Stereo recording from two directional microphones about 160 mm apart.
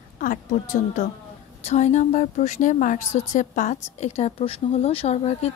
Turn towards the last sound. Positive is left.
turn(degrees=40)  # may be behind; listen again after turning